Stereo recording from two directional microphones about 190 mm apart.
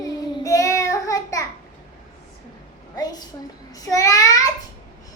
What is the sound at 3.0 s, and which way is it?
Child singing, 20° left (ahead or behind).